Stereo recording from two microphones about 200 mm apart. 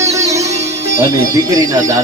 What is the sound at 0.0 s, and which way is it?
Music, 15° right (ahead or behind).